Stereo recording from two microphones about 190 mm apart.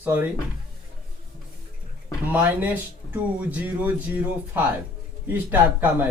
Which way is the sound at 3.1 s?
10° right (ahead or behind).